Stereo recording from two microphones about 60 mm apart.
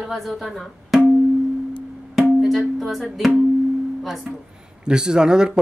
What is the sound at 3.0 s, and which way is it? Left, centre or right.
Speech, centre.